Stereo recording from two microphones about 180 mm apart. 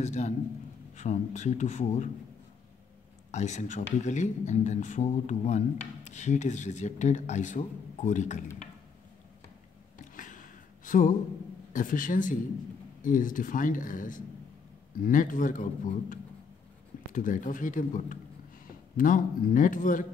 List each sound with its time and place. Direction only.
0.0 s speech: 40° left (ahead or behind)
3.3 s speech: 40° left (ahead or behind)
10.1 s a sound: 45° left (ahead or behind)
10.9 s speech: 45° left (ahead or behind)